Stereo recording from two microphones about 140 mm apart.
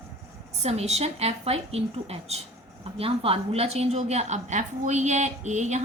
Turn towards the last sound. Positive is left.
turn(degrees=-55)  # may be behind; listen again after turning